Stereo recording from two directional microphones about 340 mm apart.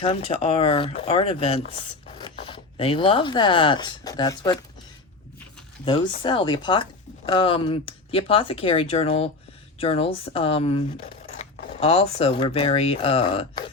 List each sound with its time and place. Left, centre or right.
0.0 s speech: centre
5.8 s speech: centre